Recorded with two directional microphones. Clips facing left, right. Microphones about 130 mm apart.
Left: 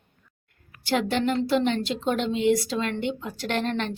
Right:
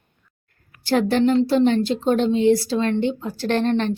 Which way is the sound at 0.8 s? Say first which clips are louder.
Right 6 dB; 40° right (ahead or behind).